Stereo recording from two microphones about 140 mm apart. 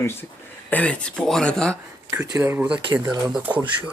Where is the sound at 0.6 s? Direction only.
10° left (ahead or behind).